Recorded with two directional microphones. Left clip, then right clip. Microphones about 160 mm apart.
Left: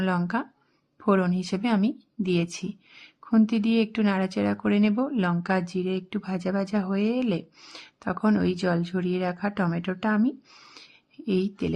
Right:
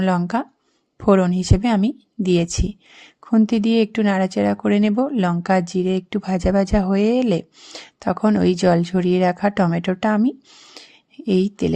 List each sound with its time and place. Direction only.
0.0 s a woman's voice: 35° right (ahead or behind)
10.2 s speech: 20° right (ahead or behind)
10.8 s a sound: 35° right (ahead or behind)